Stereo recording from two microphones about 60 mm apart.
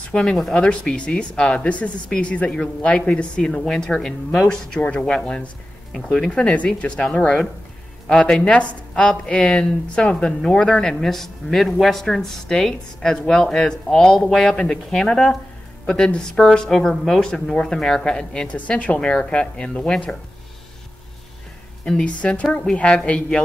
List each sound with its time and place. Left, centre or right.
0.1 s a woman's voice: centre
21.8 s a woman's voice: centre